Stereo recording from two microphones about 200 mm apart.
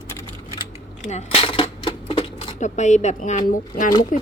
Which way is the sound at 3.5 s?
40° left (ahead or behind).